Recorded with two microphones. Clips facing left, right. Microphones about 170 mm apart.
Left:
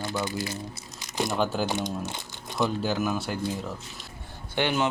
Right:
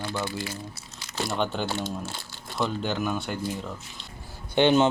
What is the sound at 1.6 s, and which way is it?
Speech, 15° left (ahead or behind).